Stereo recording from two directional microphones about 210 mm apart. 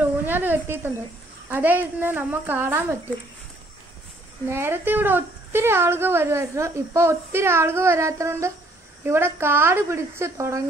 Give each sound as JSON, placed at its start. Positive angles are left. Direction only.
{"t": 0.2, "sound": "a woman's voice", "side_deg": -10}
{"t": 4.5, "sound": "a woman's voice", "side_deg": -10}